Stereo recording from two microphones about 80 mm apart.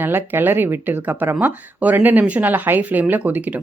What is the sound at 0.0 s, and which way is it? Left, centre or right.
Speech, right.